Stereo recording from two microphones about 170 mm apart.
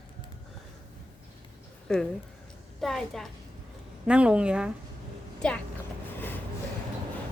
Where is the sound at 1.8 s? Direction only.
5° left (ahead or behind).